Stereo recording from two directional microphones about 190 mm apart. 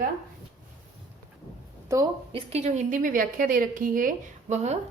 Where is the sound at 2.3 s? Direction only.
35° right (ahead or behind).